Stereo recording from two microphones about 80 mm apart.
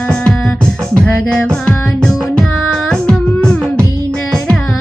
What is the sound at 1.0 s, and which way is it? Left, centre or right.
Music, centre.